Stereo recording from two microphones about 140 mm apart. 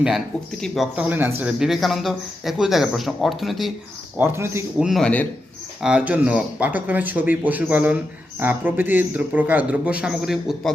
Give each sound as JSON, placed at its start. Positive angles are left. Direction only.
{"t": 0.6, "sound": "speech", "side_deg": -5}
{"t": 4.2, "sound": "a man's voice", "side_deg": -15}
{"t": 4.8, "sound": "speech", "side_deg": 0}
{"t": 5.8, "sound": "a man's voice", "side_deg": -10}